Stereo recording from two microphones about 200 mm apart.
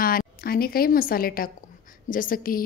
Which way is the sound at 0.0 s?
45° left (ahead or behind).